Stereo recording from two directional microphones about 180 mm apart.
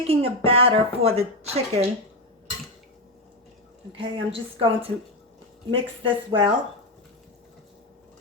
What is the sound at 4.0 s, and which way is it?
Speech, 30° right (ahead or behind).